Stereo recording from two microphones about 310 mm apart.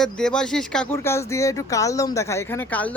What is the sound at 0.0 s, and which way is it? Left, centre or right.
Speech, centre.